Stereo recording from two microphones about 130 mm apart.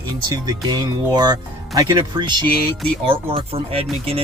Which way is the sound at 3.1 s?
45° right (ahead or behind).